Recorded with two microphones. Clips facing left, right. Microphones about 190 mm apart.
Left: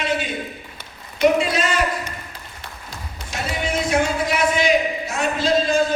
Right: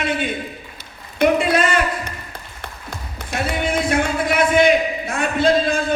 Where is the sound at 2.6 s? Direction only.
55° right (ahead or behind).